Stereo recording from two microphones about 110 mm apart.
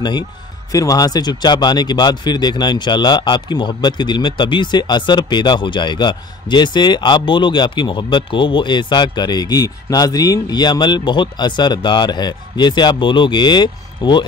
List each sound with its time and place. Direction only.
0.7 s speech: 35° left (ahead or behind)